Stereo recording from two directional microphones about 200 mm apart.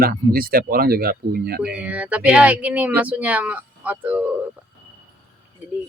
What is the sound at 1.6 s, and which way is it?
Speech, 5° right (ahead or behind).